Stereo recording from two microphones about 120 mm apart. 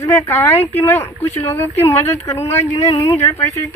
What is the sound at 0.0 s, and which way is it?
Speech, 25° left (ahead or behind).